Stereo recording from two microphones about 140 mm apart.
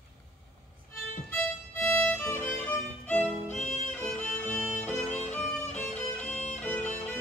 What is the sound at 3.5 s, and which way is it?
Music, 55° left (ahead or behind).